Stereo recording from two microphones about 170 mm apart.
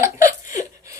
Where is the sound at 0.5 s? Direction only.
20° right (ahead or behind).